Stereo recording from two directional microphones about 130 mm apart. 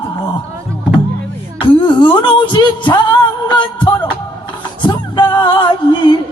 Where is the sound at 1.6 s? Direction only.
40° left (ahead or behind).